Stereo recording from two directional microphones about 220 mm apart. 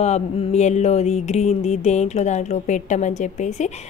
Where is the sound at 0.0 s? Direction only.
30° left (ahead or behind).